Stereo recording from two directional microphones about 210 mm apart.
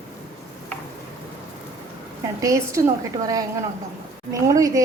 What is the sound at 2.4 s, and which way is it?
Speech, 15° right (ahead or behind).